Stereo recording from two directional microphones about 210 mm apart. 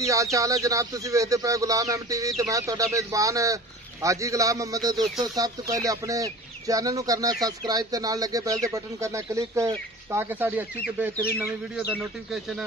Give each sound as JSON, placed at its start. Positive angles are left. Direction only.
{"t": 0.0, "sound": "speech", "side_deg": -15}
{"t": 4.9, "sound": "speech", "side_deg": 0}
{"t": 5.2, "sound": "speech", "side_deg": -15}